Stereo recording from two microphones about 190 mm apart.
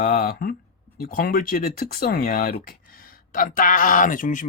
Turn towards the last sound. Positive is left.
turn(degrees=45)  # may be behind; listen again after turning